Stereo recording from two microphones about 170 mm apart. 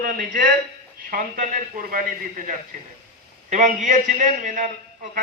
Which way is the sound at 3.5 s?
45° right (ahead or behind).